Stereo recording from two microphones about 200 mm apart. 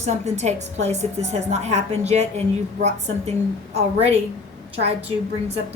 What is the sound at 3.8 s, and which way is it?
A woman's voice, 30° right (ahead or behind).